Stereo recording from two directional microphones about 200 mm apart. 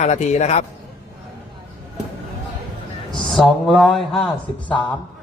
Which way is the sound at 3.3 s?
Centre (ahead or behind).